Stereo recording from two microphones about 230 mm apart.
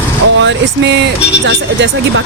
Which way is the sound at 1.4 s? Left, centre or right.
Right.